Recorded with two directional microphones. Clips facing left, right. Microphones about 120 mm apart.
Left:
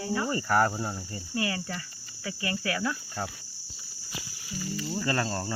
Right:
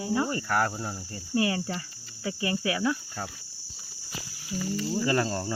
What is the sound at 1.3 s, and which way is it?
Speech, 25° right (ahead or behind).